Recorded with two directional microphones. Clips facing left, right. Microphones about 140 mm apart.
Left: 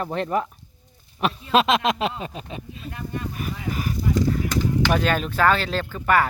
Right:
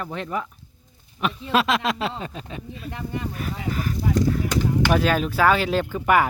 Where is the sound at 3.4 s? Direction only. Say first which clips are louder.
Even; 10° left (ahead or behind).